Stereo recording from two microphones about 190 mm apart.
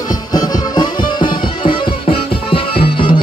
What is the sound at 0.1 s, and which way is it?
Music, 20° left (ahead or behind).